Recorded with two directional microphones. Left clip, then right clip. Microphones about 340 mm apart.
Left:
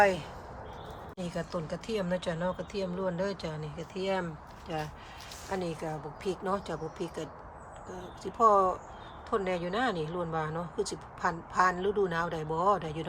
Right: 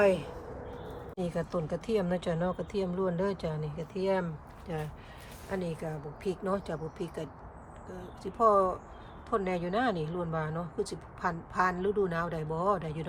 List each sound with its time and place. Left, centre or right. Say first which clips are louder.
0.0 s speech: left 1 dB; centre